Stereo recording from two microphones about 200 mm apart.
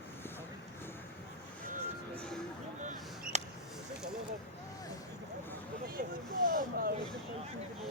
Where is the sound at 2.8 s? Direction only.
35° right (ahead or behind).